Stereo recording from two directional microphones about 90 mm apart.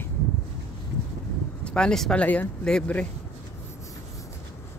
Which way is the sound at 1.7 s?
10° left (ahead or behind).